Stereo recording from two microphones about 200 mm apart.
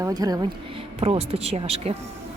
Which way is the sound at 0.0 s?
20° right (ahead or behind).